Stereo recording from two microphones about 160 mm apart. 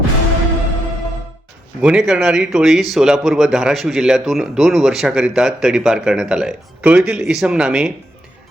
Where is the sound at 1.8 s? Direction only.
5° right (ahead or behind).